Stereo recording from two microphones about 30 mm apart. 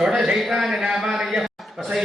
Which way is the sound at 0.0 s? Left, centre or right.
Centre.